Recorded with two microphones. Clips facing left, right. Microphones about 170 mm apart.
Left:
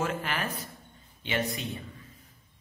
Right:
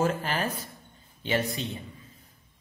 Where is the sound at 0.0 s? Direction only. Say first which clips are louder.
Right 4 dB; 35° right (ahead or behind).